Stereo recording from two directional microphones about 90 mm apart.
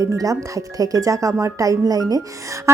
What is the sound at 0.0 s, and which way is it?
A woman's voice, 40° right (ahead or behind).